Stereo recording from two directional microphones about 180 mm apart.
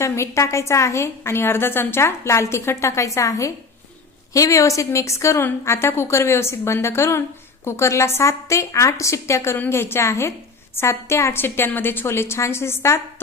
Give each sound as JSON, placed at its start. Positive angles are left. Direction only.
{"t": 0.0, "sound": "a woman's voice", "side_deg": 15}